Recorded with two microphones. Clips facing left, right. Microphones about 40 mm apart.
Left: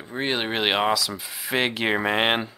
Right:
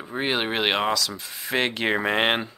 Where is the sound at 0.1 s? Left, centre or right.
Centre.